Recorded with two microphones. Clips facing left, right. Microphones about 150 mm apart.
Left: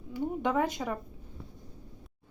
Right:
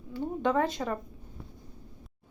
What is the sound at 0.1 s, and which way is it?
Speech, 15° left (ahead or behind).